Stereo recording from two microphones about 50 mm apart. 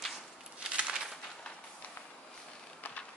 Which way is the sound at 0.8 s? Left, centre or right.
Centre.